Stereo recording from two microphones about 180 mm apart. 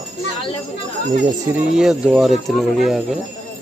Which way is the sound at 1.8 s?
5° right (ahead or behind).